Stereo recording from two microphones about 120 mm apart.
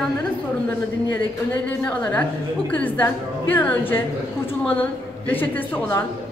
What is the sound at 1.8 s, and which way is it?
A woman's voice, 10° left (ahead or behind).